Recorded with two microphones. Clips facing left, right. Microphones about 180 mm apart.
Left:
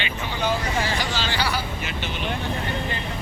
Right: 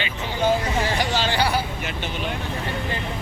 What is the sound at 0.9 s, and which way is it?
Speech, 55° right (ahead or behind).